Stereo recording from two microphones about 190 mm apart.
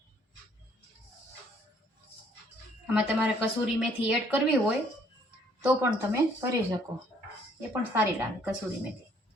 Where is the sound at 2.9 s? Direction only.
5° right (ahead or behind).